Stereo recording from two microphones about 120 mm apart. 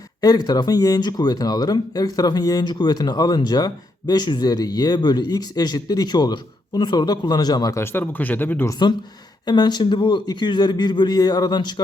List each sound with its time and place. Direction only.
0.2 s speech: 35° left (ahead or behind)
7.8 s speech: 15° left (ahead or behind)
9.5 s speech: 35° left (ahead or behind)